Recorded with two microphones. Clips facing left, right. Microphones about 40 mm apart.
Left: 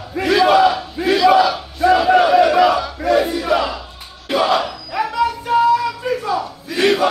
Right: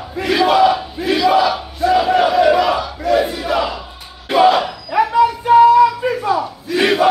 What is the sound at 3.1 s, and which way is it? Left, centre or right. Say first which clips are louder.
Battle cry: even; centre.